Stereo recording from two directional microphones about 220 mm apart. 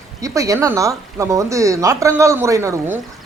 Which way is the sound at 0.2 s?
15° right (ahead or behind).